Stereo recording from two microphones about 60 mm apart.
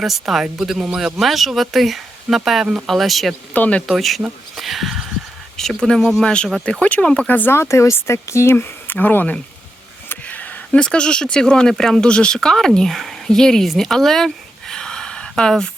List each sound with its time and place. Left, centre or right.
0.0 s speech: centre
3.5 s speech: left
3.8 s speech: centre
6.2 s speech: centre
7.3 s speech: left
7.5 s speech: left
8.5 s speech: left
10.2 s a sound: left
10.8 s speech: centre
14.7 s a sound: centre